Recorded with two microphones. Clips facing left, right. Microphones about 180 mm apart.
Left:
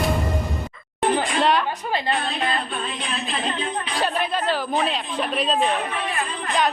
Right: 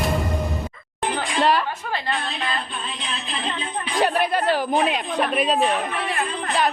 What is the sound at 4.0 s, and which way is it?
A man's voice, 15° right (ahead or behind).